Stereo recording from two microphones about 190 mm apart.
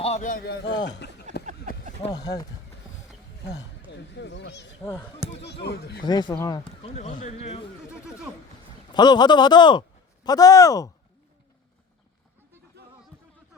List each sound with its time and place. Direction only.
0.0 s a man's voice: 40° left (ahead or behind); by 1.4 s 65° left (ahead or behind)
2.0 s speech: 20° left (ahead or behind)
4.1 s speech: 65° left (ahead or behind)
6.0 s speech: 20° left (ahead or behind)
6.8 s speech: 35° left (ahead or behind)
7.9 s speech: 5° right (ahead or behind)
8.9 s speech: 20° left (ahead or behind)